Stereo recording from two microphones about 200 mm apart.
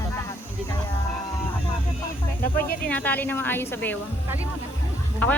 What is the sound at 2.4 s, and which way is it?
Speech, 45° left (ahead or behind).